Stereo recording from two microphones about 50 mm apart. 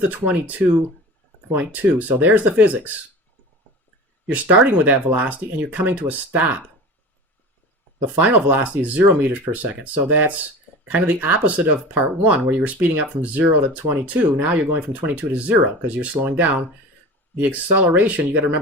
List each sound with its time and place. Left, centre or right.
0.1 s speech: right
4.3 s speech: right
8.4 s speech: right